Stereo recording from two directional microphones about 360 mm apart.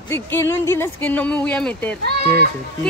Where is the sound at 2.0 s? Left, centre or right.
Right.